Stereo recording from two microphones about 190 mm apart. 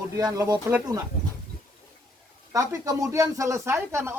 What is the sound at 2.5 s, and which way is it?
Speech, 15° right (ahead or behind).